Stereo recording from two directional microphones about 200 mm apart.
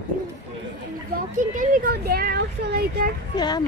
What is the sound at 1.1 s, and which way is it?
Speech, 40° right (ahead or behind).